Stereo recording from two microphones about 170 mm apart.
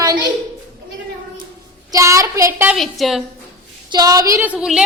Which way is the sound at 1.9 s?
20° right (ahead or behind).